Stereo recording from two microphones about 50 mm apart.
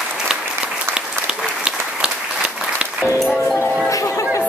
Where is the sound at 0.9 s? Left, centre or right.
Right.